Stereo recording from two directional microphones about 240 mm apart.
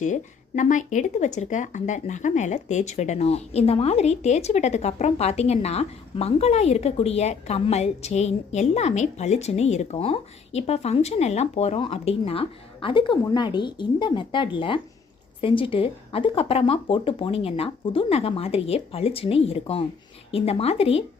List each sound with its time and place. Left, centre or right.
0.0 s speech: left